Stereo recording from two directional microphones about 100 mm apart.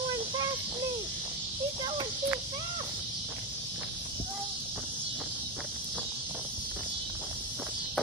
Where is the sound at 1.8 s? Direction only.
50° right (ahead or behind).